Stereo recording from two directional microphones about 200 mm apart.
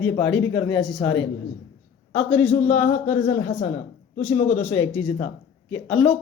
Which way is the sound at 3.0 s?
30° left (ahead or behind).